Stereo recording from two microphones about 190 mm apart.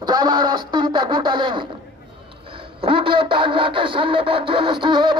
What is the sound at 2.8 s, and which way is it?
Music, 25° right (ahead or behind).